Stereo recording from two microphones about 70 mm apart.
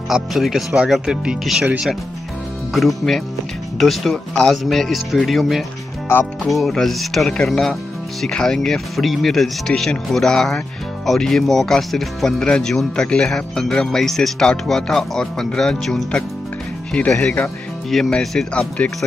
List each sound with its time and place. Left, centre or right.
0.1 s speech: centre
2.7 s speech: centre
17.8 s speech: centre
18.5 s speech: centre